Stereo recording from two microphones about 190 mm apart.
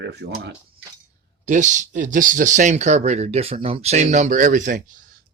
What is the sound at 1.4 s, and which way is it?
Speech, 40° right (ahead or behind).